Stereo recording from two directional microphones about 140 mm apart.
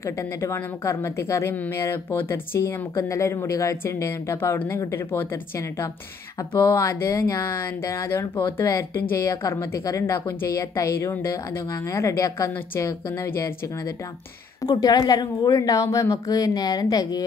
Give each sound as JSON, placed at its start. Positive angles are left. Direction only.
{"t": 0.0, "sound": "a woman's voice", "side_deg": 20}
{"t": 14.6, "sound": "a woman's voice", "side_deg": 30}